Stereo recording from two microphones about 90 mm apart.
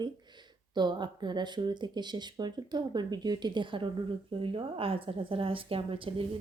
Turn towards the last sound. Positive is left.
turn(degrees=-85)